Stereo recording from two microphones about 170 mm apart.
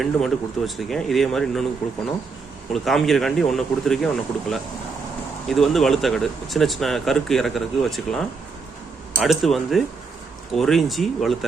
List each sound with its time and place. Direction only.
0.0 s speech: centre (ahead or behind)
2.7 s speech: centre (ahead or behind)